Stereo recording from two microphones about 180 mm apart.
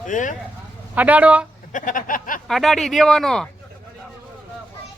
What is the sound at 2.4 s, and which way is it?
Speech, centre (ahead or behind).